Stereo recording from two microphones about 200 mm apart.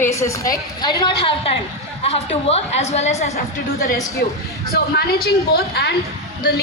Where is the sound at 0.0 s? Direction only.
15° left (ahead or behind); by 3.4 s 35° left (ahead or behind).